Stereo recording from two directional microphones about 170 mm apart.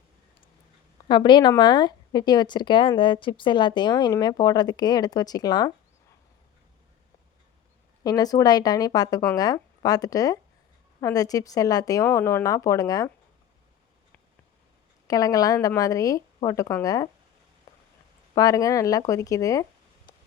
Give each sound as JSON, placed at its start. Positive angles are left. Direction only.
{"t": 1.0, "sound": "speech", "side_deg": 30}
{"t": 8.0, "sound": "speech", "side_deg": 20}
{"t": 15.0, "sound": "speech", "side_deg": 20}
{"t": 17.7, "sound": "a sound", "side_deg": 20}
{"t": 18.3, "sound": "speech", "side_deg": 20}
{"t": 20.1, "sound": "a sound", "side_deg": 25}